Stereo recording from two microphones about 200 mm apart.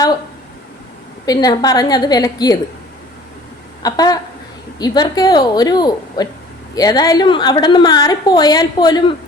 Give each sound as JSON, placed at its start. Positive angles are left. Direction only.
{"t": 1.2, "sound": "a woman's voice", "side_deg": 20}
{"t": 3.8, "sound": "a woman's voice", "side_deg": 20}